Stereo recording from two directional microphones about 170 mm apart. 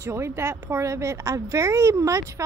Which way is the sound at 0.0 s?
15° right (ahead or behind).